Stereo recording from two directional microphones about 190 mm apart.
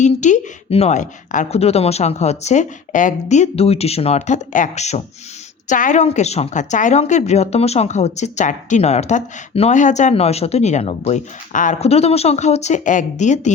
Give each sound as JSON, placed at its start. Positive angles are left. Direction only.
{"t": 0.0, "sound": "a woman's voice", "side_deg": 40}